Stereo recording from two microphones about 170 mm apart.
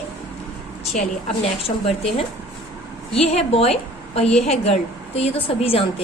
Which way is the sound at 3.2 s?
35° left (ahead or behind).